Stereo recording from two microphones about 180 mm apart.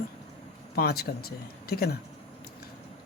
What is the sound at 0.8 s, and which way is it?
Speech, 60° left (ahead or behind).